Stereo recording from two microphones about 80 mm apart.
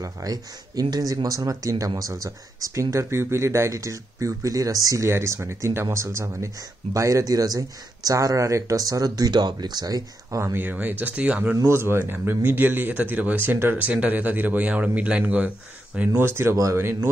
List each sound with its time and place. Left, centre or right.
0.0 s speech: right
10.4 s speech: right
11.6 s speech: right
16.2 s speech: right